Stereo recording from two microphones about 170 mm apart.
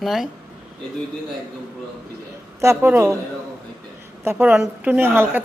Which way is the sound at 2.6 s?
15° right (ahead or behind).